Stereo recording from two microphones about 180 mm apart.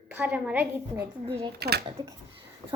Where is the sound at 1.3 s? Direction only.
30° right (ahead or behind).